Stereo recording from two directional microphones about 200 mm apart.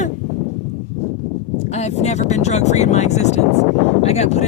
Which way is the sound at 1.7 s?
35° left (ahead or behind).